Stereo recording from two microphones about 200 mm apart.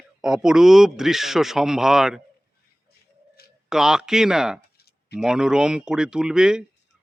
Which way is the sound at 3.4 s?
50° left (ahead or behind).